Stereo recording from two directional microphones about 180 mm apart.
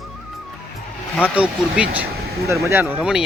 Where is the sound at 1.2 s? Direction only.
5° right (ahead or behind).